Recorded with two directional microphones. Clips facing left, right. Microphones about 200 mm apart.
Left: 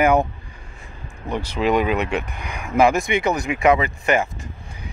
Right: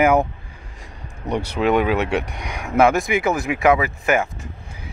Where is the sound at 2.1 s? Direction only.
75° right (ahead or behind).